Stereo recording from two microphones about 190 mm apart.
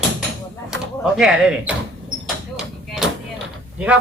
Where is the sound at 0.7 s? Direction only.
5° right (ahead or behind).